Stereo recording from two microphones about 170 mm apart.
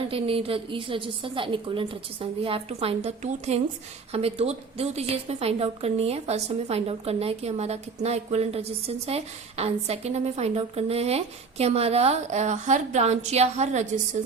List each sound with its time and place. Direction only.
0.1 s a woman's voice: 35° right (ahead or behind)